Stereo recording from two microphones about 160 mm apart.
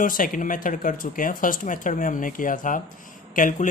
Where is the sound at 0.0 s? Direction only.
60° left (ahead or behind).